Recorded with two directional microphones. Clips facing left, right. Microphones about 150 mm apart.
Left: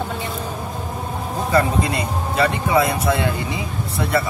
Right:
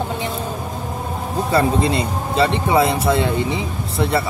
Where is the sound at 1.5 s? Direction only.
30° right (ahead or behind).